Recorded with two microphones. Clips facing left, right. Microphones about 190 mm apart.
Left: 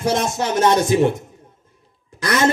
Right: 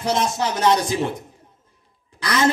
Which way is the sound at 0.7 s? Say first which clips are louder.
Left 5 dB; 25° left (ahead or behind).